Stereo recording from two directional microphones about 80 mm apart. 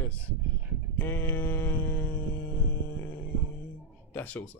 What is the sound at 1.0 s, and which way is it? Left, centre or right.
Speech, left.